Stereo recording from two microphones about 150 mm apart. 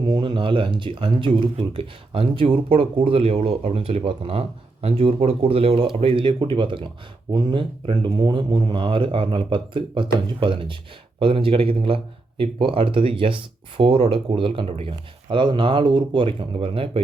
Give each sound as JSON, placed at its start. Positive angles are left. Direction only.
{"t": 0.1, "sound": "speech", "side_deg": -30}